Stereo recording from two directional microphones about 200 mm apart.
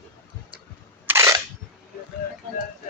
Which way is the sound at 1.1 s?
15° right (ahead or behind).